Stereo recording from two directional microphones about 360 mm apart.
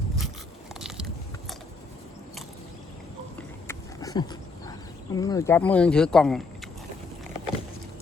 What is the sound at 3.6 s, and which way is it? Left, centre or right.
Dog, centre.